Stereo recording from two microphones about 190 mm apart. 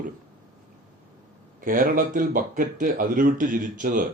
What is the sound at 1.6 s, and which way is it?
Speech, 45° right (ahead or behind).